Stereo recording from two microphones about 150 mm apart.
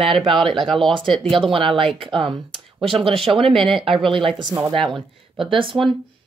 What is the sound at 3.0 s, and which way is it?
Speech, 35° right (ahead or behind).